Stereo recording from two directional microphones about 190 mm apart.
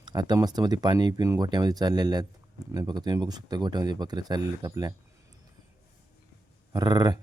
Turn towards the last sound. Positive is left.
turn(degrees=-20)  # may be behind; listen again after turning